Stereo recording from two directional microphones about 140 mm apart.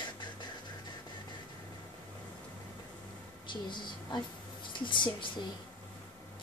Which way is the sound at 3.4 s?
35° left (ahead or behind).